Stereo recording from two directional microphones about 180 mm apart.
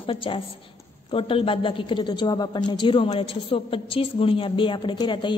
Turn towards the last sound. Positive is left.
turn(degrees=25)  # may be behind; listen again after turning